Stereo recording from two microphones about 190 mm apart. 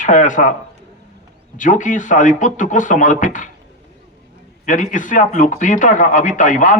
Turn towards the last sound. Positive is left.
turn(degrees=40)  # may be behind; listen again after turning